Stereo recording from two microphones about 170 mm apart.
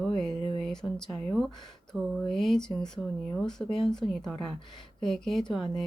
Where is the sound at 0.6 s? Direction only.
5° left (ahead or behind).